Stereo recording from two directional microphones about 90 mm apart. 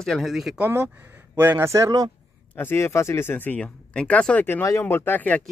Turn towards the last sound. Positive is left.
turn(degrees=20)  # may be behind; listen again after turning